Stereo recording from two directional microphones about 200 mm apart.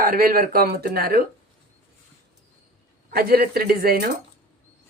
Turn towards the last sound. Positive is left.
turn(degrees=-50)  # may be behind; listen again after turning